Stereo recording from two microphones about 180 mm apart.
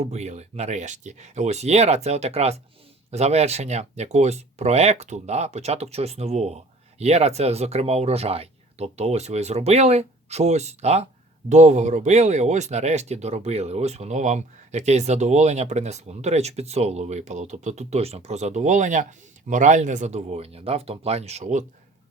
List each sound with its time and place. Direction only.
0.0 s speech: 40° right (ahead or behind)